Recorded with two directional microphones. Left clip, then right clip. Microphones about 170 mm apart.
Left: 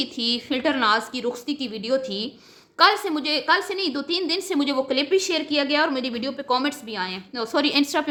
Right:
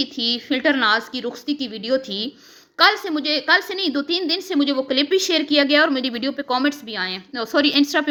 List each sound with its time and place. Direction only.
0.0 s a woman's voice: 10° right (ahead or behind)